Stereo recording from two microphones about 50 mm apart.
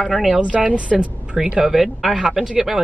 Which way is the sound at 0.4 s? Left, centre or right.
Right.